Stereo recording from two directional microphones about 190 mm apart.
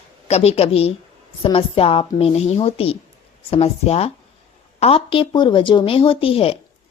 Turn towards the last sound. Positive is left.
turn(degrees=30)  # may be behind; listen again after turning